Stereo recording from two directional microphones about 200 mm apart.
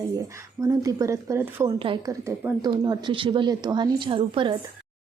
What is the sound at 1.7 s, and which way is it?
A woman's voice, 25° right (ahead or behind).